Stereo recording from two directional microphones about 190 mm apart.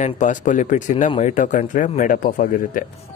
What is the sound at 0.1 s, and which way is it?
Speech, 40° left (ahead or behind).